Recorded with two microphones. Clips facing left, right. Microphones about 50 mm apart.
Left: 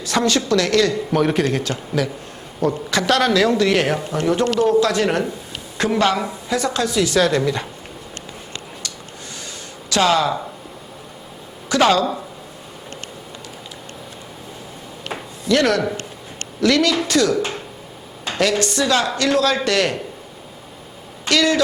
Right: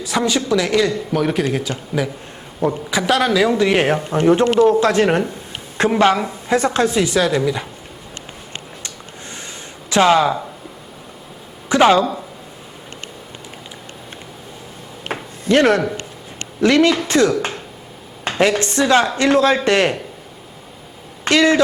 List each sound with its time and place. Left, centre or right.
0.0 s a man's voice: centre
1.1 s a man's voice: centre
3.8 s speech: right
7.1 s a man's voice: centre
9.9 s speech: right
11.7 s speech: centre
15.0 s a sound: right
16.6 s speech: right
21.2 s speech: right